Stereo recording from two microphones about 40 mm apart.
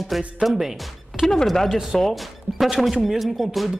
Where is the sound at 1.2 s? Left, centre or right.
Centre.